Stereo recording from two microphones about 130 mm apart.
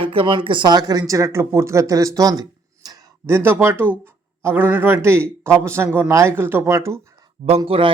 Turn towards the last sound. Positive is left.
turn(degrees=-45)  # may be behind; listen again after turning